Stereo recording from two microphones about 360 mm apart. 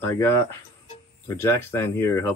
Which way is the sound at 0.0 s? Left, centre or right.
Centre.